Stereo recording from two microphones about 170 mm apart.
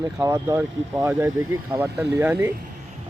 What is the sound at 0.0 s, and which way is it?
A man's voice, 20° right (ahead or behind).